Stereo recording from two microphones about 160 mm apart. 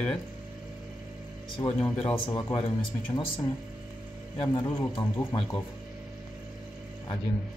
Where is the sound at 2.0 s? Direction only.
30° left (ahead or behind).